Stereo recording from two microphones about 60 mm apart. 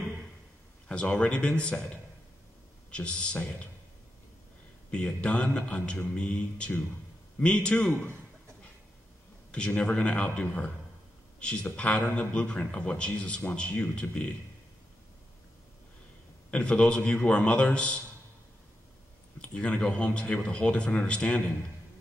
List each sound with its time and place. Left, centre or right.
0.8 s a man's voice: centre
2.9 s a man's voice: centre
4.9 s speech: centre
9.8 s a man's voice: centre
16.4 s a man's voice: centre
19.4 s speech: centre